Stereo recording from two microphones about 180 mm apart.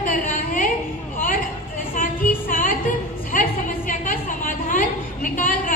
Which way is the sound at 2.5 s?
50° left (ahead or behind).